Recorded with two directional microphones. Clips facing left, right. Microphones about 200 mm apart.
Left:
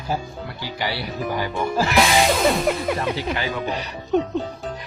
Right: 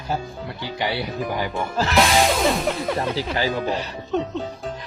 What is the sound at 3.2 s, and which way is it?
Speech, 35° right (ahead or behind).